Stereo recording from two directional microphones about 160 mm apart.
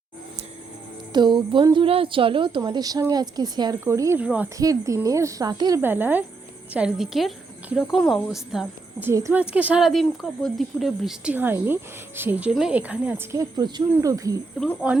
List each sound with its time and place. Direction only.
1.1 s a woman's voice: 30° right (ahead or behind); by 4.5 s 10° right (ahead or behind)
4.5 s speech: 20° right (ahead or behind)
5.8 s a woman's voice: 10° right (ahead or behind)
9.0 s speech: 15° right (ahead or behind)
13.3 s speech: 25° right (ahead or behind)
14.6 s a woman's voice: 5° left (ahead or behind)